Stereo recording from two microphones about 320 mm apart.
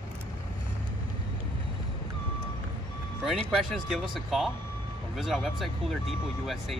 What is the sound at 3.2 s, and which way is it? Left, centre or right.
Speech, centre.